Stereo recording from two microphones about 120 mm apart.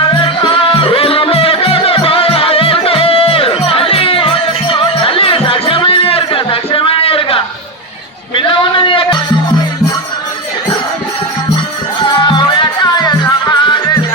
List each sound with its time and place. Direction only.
0.4 s music: 50° left (ahead or behind)
12.4 s music: 35° left (ahead or behind)